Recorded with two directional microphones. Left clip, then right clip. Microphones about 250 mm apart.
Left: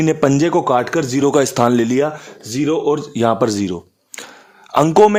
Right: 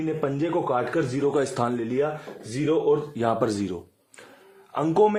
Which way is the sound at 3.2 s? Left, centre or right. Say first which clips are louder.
Left 8 dB; left.